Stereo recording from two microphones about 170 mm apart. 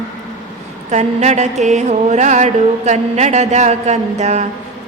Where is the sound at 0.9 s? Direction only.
40° right (ahead or behind).